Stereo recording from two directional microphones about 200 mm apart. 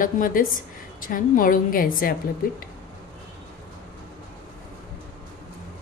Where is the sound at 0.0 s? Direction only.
45° left (ahead or behind).